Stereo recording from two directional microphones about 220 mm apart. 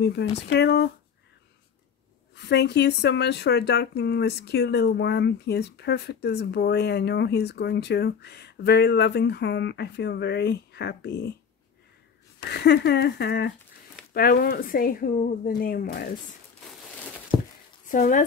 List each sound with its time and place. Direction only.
0.0 s speech: 50° left (ahead or behind)
2.3 s speech: 50° left (ahead or behind)
12.4 s speech: 50° left (ahead or behind)
17.3 s a sound: centre (ahead or behind)
17.9 s speech: 35° left (ahead or behind)